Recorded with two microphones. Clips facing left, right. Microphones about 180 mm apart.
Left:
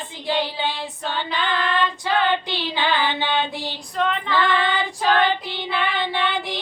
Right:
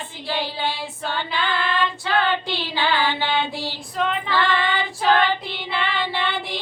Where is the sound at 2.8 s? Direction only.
20° left (ahead or behind).